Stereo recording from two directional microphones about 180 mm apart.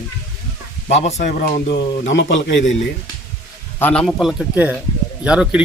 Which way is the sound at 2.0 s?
90° left.